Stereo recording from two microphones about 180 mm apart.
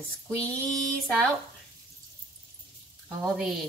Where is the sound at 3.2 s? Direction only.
Centre (ahead or behind).